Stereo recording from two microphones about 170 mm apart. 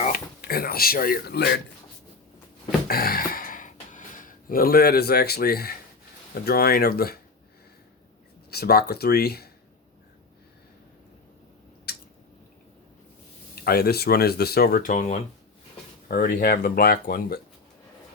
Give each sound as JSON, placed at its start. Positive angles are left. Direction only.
{"t": 0.1, "sound": "speech", "side_deg": 60}
{"t": 2.8, "sound": "gasp", "side_deg": 60}
{"t": 6.3, "sound": "speech", "side_deg": 65}
{"t": 8.4, "sound": "speech", "side_deg": 65}
{"t": 11.9, "sound": "squish", "side_deg": 70}
{"t": 13.7, "sound": "speech", "side_deg": 65}
{"t": 16.0, "sound": "speech", "side_deg": 60}